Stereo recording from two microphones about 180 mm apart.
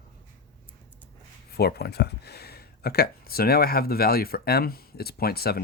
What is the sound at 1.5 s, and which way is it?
Speech, 60° left (ahead or behind).